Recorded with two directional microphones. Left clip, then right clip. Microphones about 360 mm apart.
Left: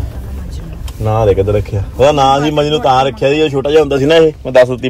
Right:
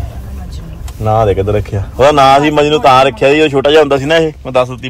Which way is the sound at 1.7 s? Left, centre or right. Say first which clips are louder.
Right 4 dB; centre.